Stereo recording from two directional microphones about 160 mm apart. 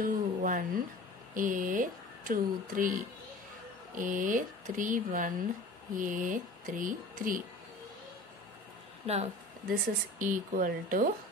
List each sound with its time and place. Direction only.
0.0 s a sound: 60° right (ahead or behind)
1.3 s speech: 55° right (ahead or behind)
9.0 s speech: 40° right (ahead or behind)
10.1 s speech: 55° right (ahead or behind)